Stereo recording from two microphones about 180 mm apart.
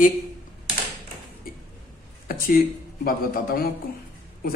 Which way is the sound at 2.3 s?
55° left (ahead or behind).